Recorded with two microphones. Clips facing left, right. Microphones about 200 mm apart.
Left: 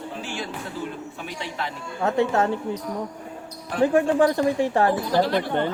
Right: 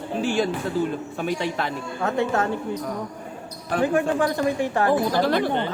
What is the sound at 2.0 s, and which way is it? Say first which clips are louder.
Speech: left 2 dB; 30° left (ahead or behind).